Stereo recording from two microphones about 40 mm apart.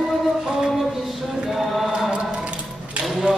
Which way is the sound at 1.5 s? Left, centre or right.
Centre.